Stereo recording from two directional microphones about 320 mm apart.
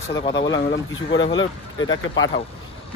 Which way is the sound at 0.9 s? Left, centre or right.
Left.